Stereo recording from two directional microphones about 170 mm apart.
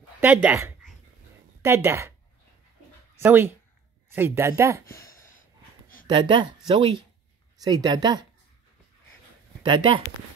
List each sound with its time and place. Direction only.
0.2 s a woman's voice: 10° right (ahead or behind)
3.3 s speech: 15° right (ahead or behind)
5.0 s a sound: 55° left (ahead or behind)
6.0 s speech: 30° right (ahead or behind)
9.6 s speech: 25° right (ahead or behind)